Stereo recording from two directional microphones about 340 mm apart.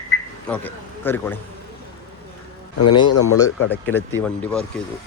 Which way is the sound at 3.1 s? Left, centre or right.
Left.